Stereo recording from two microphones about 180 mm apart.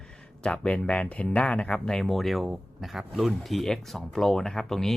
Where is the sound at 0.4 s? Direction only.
5° left (ahead or behind).